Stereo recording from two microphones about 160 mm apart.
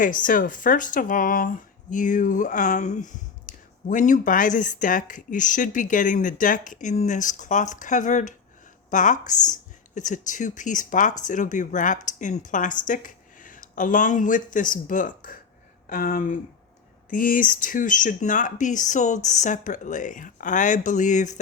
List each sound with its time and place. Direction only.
0.0 s speech: 55° left (ahead or behind)